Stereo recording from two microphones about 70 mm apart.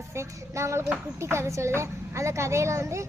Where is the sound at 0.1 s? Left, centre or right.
Right.